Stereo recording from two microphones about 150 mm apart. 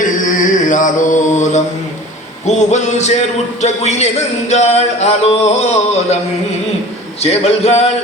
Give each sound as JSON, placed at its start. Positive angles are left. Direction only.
{"t": 0.0, "sound": "mantra", "side_deg": 60}
{"t": 2.5, "sound": "a man's voice", "side_deg": 50}
{"t": 7.2, "sound": "a man's voice", "side_deg": 45}